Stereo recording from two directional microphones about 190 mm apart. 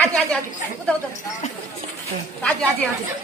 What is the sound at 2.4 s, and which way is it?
Speech, 10° left (ahead or behind).